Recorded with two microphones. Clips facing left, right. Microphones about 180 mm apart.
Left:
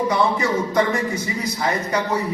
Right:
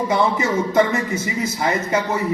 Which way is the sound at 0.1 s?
25° right (ahead or behind).